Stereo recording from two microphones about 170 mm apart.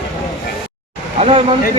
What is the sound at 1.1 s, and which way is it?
Speech, 35° right (ahead or behind).